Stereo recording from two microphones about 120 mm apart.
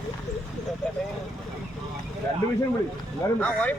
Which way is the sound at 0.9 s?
10° left (ahead or behind).